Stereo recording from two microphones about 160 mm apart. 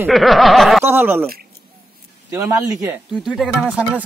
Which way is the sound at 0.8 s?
15° right (ahead or behind).